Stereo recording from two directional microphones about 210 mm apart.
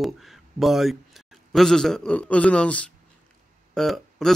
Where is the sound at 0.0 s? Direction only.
Centre (ahead or behind).